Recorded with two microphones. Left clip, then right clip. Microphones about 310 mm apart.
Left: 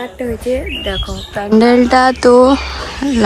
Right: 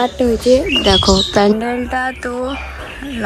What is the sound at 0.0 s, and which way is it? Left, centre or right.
Speech, centre.